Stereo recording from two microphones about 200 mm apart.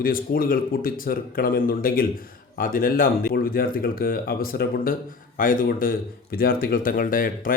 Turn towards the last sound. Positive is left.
turn(degrees=45)  # may be behind; listen again after turning